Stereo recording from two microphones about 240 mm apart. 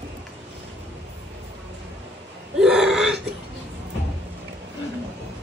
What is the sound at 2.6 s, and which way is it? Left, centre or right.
Gasp, centre.